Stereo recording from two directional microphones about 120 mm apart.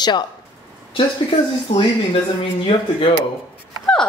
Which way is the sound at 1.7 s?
60° left (ahead or behind).